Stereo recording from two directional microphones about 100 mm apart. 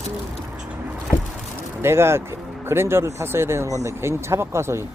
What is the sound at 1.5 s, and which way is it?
Speech, 25° right (ahead or behind).